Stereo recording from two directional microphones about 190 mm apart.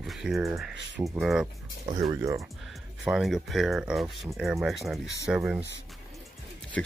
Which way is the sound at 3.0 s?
Centre (ahead or behind).